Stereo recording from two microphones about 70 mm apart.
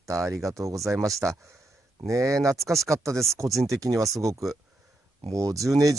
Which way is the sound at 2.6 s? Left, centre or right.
Centre.